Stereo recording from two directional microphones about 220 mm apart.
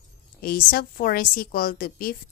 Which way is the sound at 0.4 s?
40° left (ahead or behind).